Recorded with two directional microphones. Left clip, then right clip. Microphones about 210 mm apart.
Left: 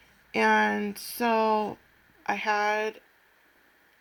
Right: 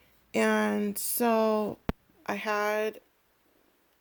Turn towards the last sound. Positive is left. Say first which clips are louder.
# left 2 dB
turn(degrees=-60)  # may be behind; listen again after turning